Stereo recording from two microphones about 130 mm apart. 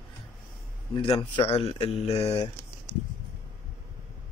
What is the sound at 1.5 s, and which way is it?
Speech, 50° left (ahead or behind).